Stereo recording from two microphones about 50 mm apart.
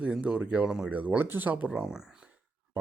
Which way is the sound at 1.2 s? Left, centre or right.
Right.